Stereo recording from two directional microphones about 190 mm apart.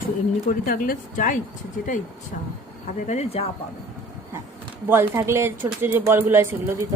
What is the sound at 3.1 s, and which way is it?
Speech, 35° left (ahead or behind).